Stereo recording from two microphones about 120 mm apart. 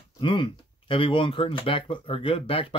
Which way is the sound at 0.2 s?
45° left (ahead or behind).